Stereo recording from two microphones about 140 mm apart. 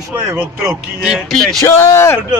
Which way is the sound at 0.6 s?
5° right (ahead or behind).